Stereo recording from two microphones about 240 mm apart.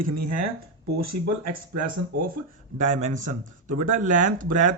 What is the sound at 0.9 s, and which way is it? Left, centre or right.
Speech, right.